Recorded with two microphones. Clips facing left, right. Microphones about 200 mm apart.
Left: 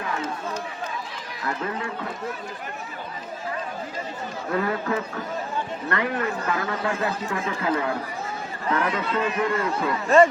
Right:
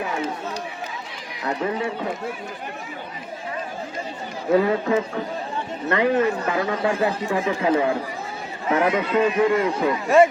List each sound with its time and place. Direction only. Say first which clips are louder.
0.0 s run: right 3 dB; 10° right (ahead or behind)
1.5 s speech: right 5 dB; 20° right (ahead or behind)
4.5 s a man's voice: right 7 dB; 20° right (ahead or behind)